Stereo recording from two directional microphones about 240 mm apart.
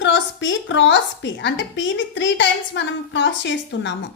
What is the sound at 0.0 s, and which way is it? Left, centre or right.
A woman's voice, left.